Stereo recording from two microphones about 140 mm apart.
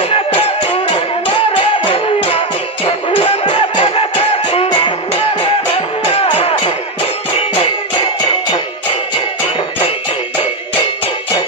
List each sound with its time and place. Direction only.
0.1 s music: 40° left (ahead or behind)